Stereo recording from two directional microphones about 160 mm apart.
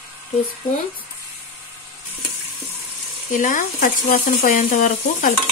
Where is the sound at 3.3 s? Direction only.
55° left (ahead or behind).